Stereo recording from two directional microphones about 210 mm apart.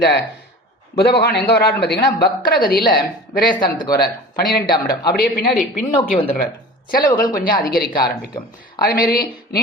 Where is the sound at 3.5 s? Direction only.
20° left (ahead or behind).